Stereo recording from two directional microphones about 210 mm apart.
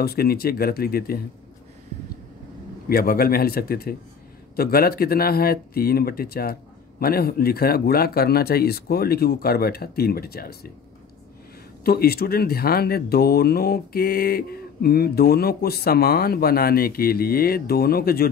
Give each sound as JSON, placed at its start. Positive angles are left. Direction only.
{"t": 0.0, "sound": "speech", "side_deg": 45}
{"t": 2.9, "sound": "speech", "side_deg": 45}
{"t": 11.8, "sound": "speech", "side_deg": 45}